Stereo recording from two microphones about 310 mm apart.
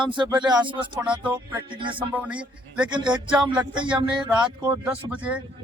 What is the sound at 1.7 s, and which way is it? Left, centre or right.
Speech, centre.